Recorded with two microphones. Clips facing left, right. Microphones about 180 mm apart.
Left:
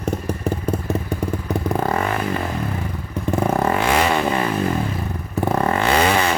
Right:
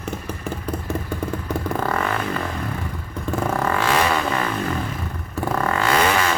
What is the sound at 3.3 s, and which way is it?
Vehicle, 20° left (ahead or behind).